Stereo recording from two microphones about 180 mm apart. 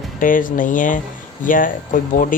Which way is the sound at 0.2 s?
50° left (ahead or behind).